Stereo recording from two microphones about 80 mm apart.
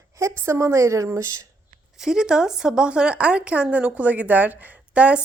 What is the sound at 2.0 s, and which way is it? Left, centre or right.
A woman's voice, centre.